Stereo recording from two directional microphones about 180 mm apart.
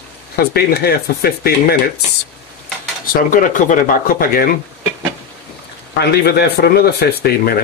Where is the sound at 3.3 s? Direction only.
45° left (ahead or behind).